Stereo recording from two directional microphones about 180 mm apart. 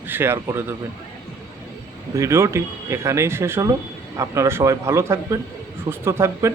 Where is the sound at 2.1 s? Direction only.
15° right (ahead or behind).